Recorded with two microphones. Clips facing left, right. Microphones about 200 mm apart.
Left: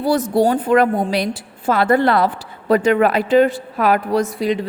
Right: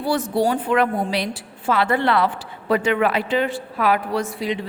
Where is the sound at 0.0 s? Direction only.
40° left (ahead or behind).